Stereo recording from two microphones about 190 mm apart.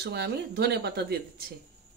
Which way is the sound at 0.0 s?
60° right (ahead or behind).